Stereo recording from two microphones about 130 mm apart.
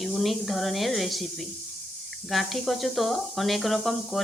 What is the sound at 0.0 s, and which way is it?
Speech, centre (ahead or behind).